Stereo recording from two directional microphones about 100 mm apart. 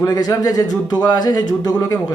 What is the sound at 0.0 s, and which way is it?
Speech, 35° left (ahead or behind).